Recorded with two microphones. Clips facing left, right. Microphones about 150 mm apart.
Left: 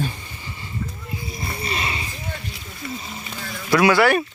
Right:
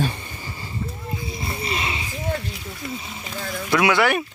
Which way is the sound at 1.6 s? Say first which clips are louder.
Even; 25° right (ahead or behind).